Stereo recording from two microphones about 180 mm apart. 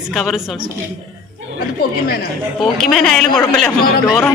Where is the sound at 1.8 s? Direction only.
60° left (ahead or behind).